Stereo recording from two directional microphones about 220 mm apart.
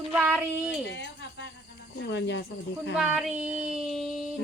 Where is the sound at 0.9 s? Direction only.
55° left (ahead or behind).